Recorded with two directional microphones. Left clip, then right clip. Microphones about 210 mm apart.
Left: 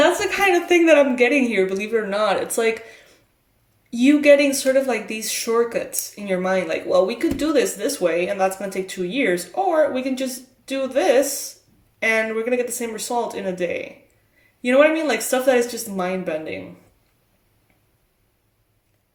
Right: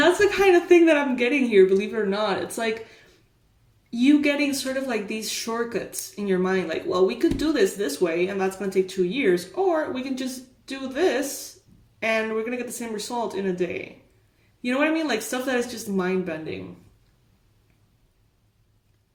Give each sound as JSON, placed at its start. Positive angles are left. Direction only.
{"t": 0.0, "sound": "a woman's voice", "side_deg": 25}
{"t": 3.8, "sound": "speech", "side_deg": 30}